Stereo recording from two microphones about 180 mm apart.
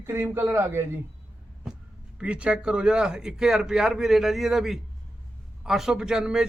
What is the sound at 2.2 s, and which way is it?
A man's voice, 5° right (ahead or behind).